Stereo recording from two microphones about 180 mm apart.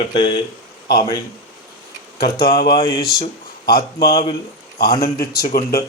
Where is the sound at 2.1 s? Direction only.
60° left (ahead or behind).